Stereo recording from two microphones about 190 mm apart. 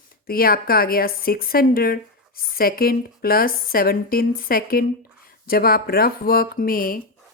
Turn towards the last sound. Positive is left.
turn(degrees=50)  # may be behind; listen again after turning